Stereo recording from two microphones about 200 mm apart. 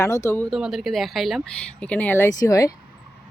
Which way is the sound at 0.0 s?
15° left (ahead or behind).